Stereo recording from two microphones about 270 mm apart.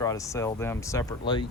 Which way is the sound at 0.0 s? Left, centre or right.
Centre.